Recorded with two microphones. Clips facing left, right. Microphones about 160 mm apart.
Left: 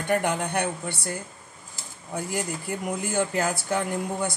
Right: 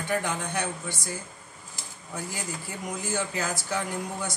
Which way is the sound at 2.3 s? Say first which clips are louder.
Left 6 dB; 55° left (ahead or behind).